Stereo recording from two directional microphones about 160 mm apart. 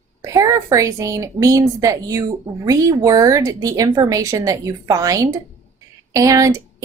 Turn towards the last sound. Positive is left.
turn(degrees=-20)  # may be behind; listen again after turning